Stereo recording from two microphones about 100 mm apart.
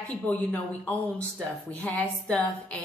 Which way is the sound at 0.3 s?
15° left (ahead or behind).